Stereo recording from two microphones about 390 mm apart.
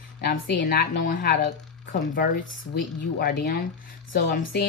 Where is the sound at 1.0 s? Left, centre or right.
Left.